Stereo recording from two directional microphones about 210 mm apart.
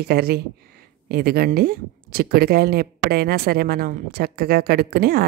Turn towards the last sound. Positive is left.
turn(degrees=-50)  # may be behind; listen again after turning